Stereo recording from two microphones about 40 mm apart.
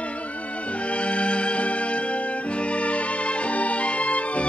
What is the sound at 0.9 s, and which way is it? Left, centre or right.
Music, left.